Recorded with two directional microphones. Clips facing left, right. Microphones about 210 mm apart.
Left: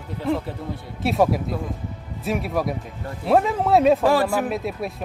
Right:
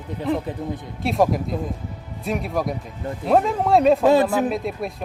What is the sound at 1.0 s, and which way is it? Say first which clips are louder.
Speech: even; centre (ahead or behind).